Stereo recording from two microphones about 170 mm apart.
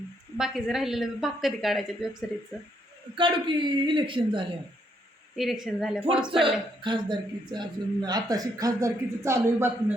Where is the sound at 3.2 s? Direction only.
30° right (ahead or behind).